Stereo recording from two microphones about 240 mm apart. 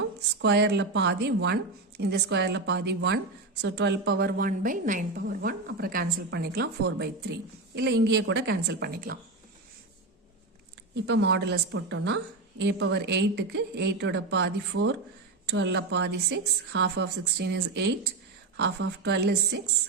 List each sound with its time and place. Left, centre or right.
0.4 s a woman's voice: right
10.9 s a woman's voice: right